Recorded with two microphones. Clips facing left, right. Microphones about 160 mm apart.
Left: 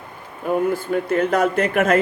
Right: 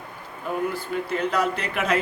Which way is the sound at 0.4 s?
50° left (ahead or behind).